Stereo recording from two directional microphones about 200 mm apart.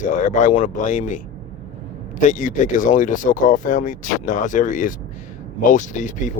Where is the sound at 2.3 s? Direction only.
40° left (ahead or behind).